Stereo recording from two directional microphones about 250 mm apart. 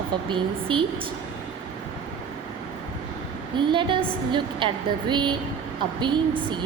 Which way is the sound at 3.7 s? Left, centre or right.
Centre.